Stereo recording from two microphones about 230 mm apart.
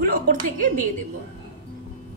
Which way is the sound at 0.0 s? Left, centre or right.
Right.